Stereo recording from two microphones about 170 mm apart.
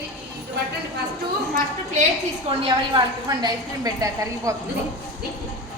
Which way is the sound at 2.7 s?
25° right (ahead or behind).